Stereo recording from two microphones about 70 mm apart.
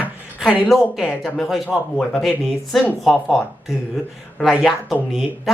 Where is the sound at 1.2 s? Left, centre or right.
Centre.